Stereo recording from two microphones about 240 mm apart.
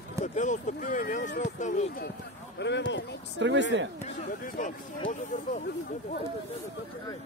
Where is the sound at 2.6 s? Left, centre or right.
Left.